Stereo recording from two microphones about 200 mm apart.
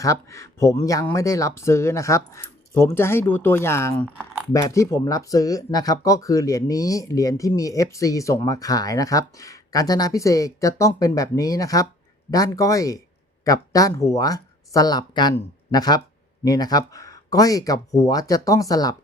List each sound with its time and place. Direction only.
0.0 s speech: 15° left (ahead or behind)